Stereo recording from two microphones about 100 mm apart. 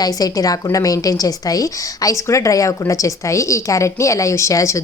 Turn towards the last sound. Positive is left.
turn(degrees=30)  # may be behind; listen again after turning